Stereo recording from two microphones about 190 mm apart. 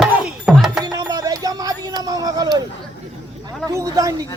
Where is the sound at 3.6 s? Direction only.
15° right (ahead or behind).